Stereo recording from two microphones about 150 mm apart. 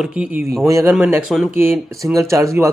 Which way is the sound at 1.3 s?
Centre (ahead or behind).